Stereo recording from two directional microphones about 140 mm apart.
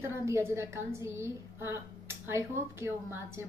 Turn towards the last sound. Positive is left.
turn(degrees=-20)  # may be behind; listen again after turning